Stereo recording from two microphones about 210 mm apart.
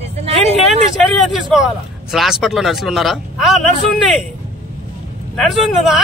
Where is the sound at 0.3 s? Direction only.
30° right (ahead or behind).